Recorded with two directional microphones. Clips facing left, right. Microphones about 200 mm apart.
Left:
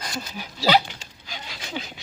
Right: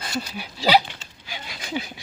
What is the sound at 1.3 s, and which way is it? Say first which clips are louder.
Dog: right 3 dB; 10° right (ahead or behind).